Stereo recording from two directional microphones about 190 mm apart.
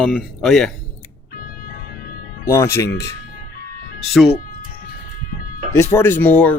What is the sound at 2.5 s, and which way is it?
Speech, 15° left (ahead or behind).